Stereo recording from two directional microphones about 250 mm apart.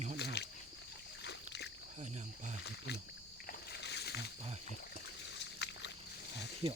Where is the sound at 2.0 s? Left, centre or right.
Right.